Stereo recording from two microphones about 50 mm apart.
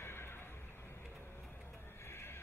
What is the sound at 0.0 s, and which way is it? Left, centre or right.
Neigh, left.